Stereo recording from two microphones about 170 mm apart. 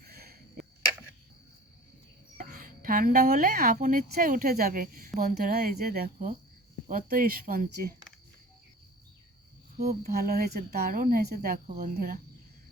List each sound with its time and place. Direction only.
0.0 s a sound: 65° right (ahead or behind)
2.4 s speech: 50° right (ahead or behind)
10.0 s speech: 65° right (ahead or behind)